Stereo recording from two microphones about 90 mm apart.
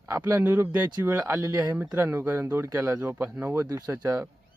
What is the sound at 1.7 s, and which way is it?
Speech, 20° right (ahead or behind).